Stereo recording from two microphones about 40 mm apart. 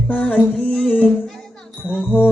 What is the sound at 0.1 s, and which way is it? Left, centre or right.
Speech, left.